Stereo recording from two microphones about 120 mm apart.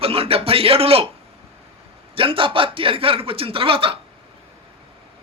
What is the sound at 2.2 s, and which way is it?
Speech, 45° right (ahead or behind).